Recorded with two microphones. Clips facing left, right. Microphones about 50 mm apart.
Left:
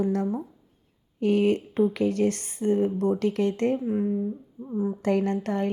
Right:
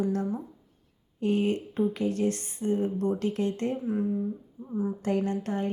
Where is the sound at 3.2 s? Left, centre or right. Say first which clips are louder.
Left 4 dB; left.